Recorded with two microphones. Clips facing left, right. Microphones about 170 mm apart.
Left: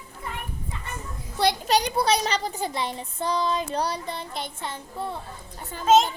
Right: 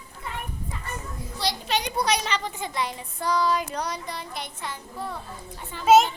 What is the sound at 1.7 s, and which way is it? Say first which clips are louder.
A child's voice: even; 35° left (ahead or behind).